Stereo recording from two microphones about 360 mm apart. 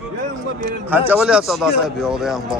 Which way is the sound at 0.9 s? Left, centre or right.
Centre.